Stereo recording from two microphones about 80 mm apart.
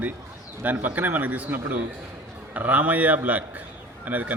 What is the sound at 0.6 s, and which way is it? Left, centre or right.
A man's voice, right.